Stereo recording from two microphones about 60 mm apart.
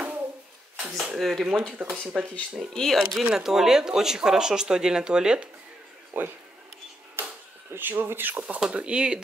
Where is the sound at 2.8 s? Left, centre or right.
Centre.